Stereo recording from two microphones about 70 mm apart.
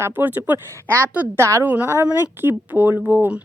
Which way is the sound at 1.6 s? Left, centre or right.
Right.